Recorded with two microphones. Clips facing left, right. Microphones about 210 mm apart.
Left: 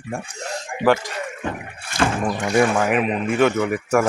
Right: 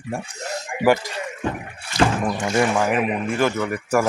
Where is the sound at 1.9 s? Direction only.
50° left (ahead or behind).